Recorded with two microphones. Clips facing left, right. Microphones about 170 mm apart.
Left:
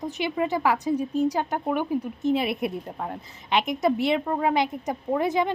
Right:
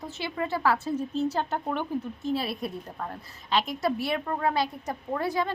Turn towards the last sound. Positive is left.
turn(degrees=20)  # may be behind; listen again after turning